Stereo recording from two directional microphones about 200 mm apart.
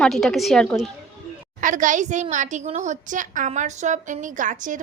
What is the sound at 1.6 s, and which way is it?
A woman's voice, 40° right (ahead or behind).